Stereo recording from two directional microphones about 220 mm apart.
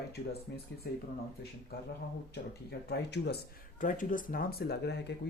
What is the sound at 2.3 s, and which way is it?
Speech, 50° left (ahead or behind).